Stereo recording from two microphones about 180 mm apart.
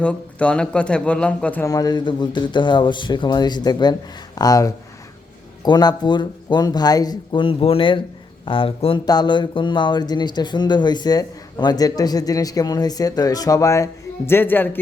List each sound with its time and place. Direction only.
0.0 s a man's voice: 5° left (ahead or behind)
1.7 s speech: 20° left (ahead or behind)